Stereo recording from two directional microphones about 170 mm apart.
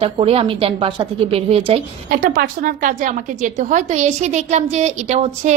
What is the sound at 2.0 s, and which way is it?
A woman's voice, 55° right (ahead or behind).